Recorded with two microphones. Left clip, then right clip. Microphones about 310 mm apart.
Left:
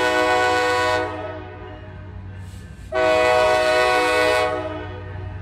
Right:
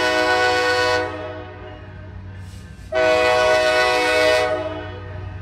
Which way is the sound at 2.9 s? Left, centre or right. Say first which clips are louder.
Right 1 dB; centre.